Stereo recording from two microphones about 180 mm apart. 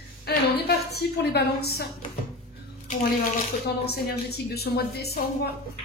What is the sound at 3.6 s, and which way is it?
A woman's voice, 60° left (ahead or behind).